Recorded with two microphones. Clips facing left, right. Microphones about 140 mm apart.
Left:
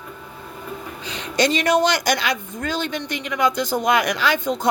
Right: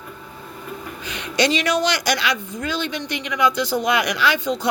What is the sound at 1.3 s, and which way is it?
Speech, 50° left (ahead or behind).